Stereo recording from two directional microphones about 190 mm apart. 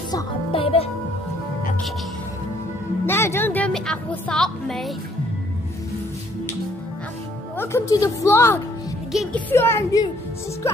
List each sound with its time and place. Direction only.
0.1 s a child's voice: 30° left (ahead or behind)
3.1 s a woman's voice: 15° left (ahead or behind)
7.5 s a woman's voice: 15° left (ahead or behind)
9.1 s a woman's voice: centre (ahead or behind)
9.5 s a woman's voice: 15° left (ahead or behind)